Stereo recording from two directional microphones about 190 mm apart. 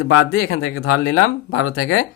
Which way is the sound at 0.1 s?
90° left.